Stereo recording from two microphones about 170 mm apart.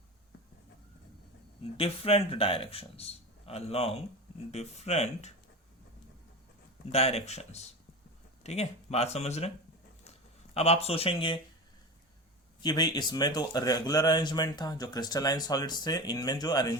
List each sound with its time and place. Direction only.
1.7 s speech: 35° left (ahead or behind)
6.9 s speech: 35° left (ahead or behind)
10.0 s a sound: 35° left (ahead or behind)
12.6 s speech: 25° left (ahead or behind)